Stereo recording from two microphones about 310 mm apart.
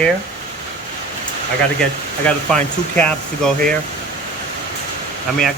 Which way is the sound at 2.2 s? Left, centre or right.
Centre.